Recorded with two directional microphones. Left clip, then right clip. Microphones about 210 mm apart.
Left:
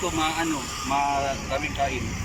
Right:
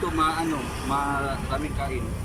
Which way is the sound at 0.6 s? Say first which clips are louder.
Left 1 dB; 55° right (ahead or behind).